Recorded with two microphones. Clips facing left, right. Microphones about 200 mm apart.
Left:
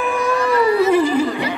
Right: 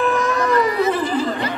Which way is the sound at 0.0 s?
10° left (ahead or behind).